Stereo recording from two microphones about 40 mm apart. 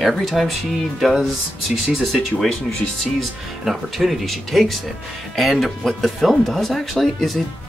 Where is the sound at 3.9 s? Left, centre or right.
Centre.